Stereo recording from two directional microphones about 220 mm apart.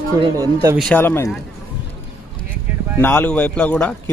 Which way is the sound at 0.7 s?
5° left (ahead or behind).